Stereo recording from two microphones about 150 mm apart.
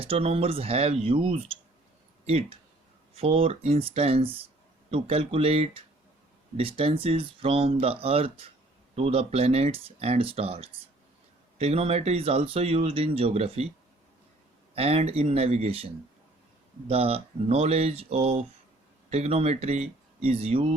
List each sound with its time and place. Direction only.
0.0 s speech: 40° right (ahead or behind)
14.8 s speech: 45° right (ahead or behind)
16.9 s speech: 40° right (ahead or behind)